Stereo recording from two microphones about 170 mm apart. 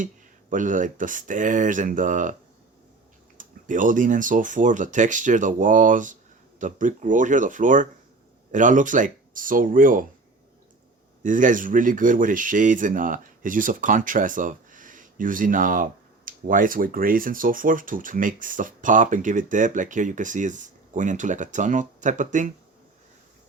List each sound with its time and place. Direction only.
0.5 s speech: 50° right (ahead or behind)
3.3 s speech: 50° right (ahead or behind)
11.2 s speech: 50° right (ahead or behind)